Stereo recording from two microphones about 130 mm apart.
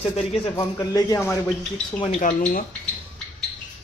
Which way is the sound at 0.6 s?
30° left (ahead or behind).